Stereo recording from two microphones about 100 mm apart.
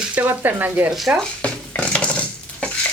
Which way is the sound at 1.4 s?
10° left (ahead or behind).